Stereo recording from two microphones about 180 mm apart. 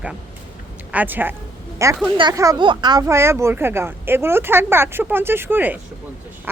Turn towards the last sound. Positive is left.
turn(degrees=-10)  # may be behind; listen again after turning